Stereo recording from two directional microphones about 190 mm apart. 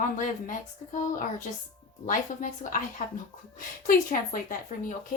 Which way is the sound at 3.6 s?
45° left (ahead or behind).